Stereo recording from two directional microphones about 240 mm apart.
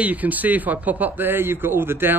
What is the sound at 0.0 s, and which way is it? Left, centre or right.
Speech, centre.